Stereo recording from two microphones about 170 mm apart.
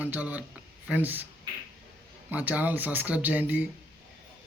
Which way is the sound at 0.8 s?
10° right (ahead or behind).